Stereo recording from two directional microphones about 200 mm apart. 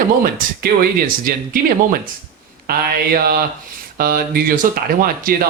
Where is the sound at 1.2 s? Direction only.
45° right (ahead or behind).